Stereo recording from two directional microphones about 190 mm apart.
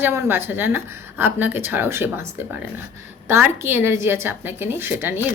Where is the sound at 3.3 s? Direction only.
10° right (ahead or behind).